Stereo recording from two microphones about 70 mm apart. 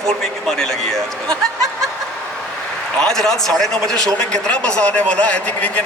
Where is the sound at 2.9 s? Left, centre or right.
Centre.